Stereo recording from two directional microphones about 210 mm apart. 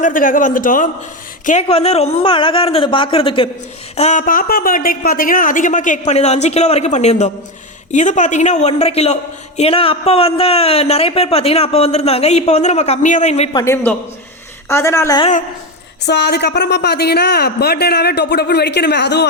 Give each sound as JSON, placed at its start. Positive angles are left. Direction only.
{"t": 0.0, "sound": "a man's voice", "side_deg": 40}
{"t": 15.2, "sound": "a man's voice", "side_deg": 35}
{"t": 16.0, "sound": "a woman's voice", "side_deg": 55}